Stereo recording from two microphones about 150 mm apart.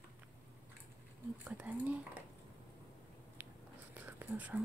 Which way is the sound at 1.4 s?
10° right (ahead or behind).